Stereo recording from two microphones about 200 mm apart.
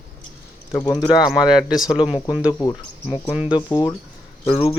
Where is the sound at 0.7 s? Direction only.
20° left (ahead or behind).